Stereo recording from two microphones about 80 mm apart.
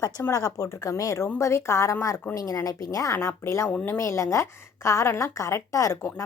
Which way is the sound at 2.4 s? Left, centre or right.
Left.